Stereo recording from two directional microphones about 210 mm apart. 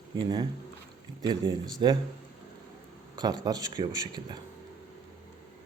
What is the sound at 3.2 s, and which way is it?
Speech, 20° right (ahead or behind).